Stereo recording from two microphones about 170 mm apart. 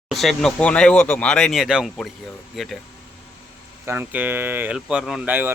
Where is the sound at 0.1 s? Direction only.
Centre (ahead or behind).